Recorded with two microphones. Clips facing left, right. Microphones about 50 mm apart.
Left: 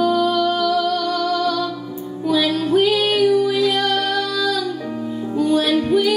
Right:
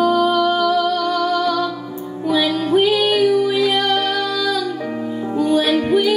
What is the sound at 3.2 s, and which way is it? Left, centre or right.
Music, right.